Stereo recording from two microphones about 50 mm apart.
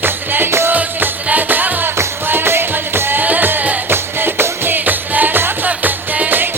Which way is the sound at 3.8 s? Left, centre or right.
Right.